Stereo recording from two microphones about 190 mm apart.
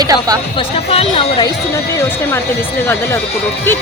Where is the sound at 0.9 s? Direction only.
30° left (ahead or behind).